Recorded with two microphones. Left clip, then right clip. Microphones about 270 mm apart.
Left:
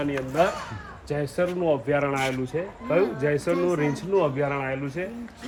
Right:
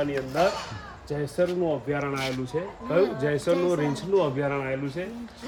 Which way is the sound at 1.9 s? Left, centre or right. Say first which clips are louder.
Left 4 dB; centre.